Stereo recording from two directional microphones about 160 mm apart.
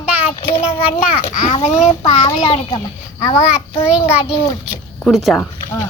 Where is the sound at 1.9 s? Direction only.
40° left (ahead or behind).